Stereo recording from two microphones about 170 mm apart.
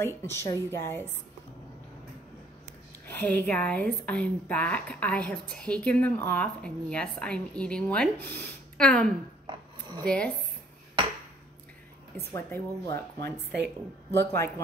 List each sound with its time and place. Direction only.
0.0 s a woman's voice: 15° left (ahead or behind)
3.1 s a woman's voice: 10° left (ahead or behind)
9.5 s a sound: 25° right (ahead or behind)
10.0 s a woman's voice: 5° left (ahead or behind)
12.3 s a woman's voice: 15° left (ahead or behind)
14.1 s a woman's voice: 15° left (ahead or behind)